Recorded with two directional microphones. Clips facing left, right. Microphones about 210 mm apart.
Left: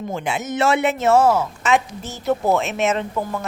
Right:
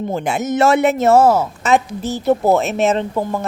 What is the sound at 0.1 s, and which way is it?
Speech, 40° right (ahead or behind).